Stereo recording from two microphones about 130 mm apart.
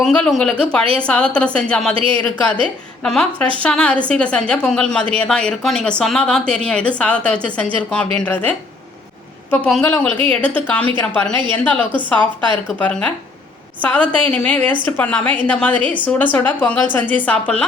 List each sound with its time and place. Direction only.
0.0 s a woman's voice: 5° left (ahead or behind)
2.0 s speech: 40° right (ahead or behind)
2.2 s a woman's voice: 10° left (ahead or behind)
9.8 s a woman's voice: 10° left (ahead or behind)